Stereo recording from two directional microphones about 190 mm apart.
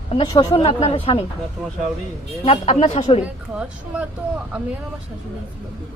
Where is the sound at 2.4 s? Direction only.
30° left (ahead or behind).